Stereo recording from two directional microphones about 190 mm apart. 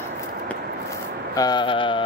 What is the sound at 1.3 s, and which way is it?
Mantra, 20° left (ahead or behind).